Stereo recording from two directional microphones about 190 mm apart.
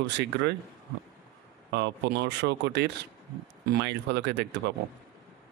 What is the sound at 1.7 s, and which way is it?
Speech, 65° right (ahead or behind).